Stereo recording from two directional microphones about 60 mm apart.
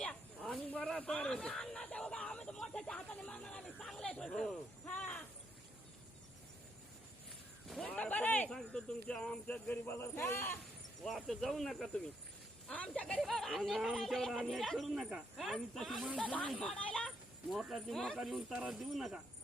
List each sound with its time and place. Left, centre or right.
0.0 s snake: centre
0.9 s speech: centre
4.9 s speech: centre
7.9 s speech: left
8.4 s speech: centre
9.6 s a man's voice: left
11.0 s speech: centre
12.6 s speech: centre
13.2 s speech: centre
17.5 s speech: centre